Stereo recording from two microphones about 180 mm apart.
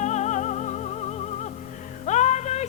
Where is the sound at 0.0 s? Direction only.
40° left (ahead or behind).